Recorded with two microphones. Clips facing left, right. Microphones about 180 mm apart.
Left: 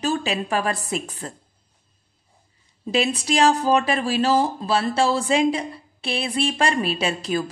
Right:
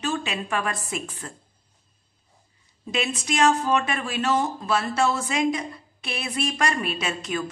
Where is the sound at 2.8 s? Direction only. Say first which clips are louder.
Left 5 dB; 35° left (ahead or behind).